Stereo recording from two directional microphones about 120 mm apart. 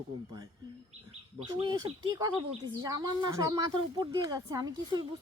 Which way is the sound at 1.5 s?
30° right (ahead or behind).